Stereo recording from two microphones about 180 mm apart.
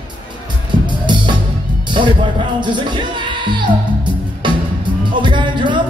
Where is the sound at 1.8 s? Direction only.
25° right (ahead or behind).